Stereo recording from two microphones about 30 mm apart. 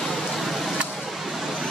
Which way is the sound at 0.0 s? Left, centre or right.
Centre.